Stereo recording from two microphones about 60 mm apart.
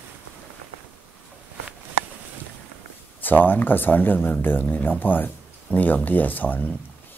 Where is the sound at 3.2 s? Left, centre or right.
Left.